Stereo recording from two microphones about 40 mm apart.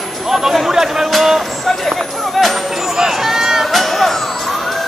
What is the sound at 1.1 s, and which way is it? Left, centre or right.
Music, centre.